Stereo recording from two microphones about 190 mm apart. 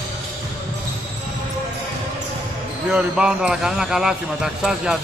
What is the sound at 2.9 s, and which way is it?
Speech, 5° right (ahead or behind).